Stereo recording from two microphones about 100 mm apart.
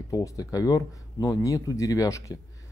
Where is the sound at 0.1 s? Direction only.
35° left (ahead or behind).